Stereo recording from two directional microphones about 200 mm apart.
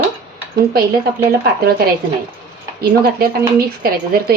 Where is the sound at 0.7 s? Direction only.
50° right (ahead or behind).